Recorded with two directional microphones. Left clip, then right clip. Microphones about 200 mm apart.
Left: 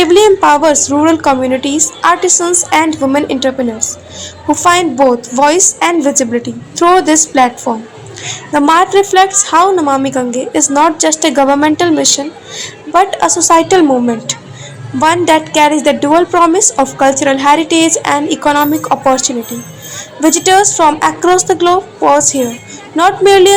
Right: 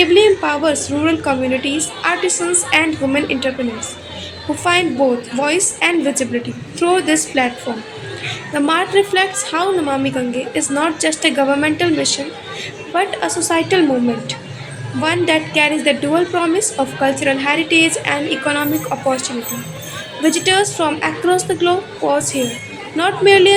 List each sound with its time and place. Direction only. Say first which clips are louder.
0.0 s a woman's voice: left 5 dB; 25° left (ahead or behind)
4.6 s a woman's voice: left 6 dB; 25° left (ahead or behind)
8.5 s a woman's voice: left 7 dB; 25° left (ahead or behind)
15.0 s a woman's voice: left 7 dB; 25° left (ahead or behind)